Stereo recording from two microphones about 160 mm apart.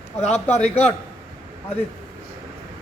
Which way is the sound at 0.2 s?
40° left (ahead or behind).